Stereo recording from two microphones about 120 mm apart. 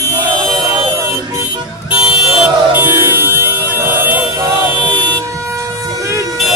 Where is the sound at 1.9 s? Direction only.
5° right (ahead or behind).